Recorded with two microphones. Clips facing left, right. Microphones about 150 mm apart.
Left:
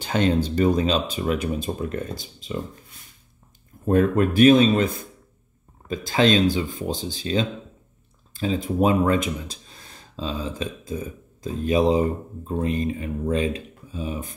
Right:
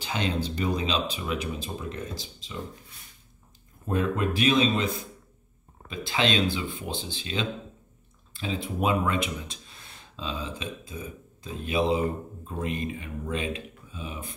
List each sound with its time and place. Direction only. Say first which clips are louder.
0.0 s speech: left 8 dB; 45° left (ahead or behind)
3.8 s speech: left 8 dB; 50° left (ahead or behind)